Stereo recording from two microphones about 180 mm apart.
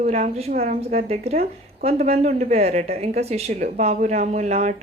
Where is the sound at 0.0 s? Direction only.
35° right (ahead or behind).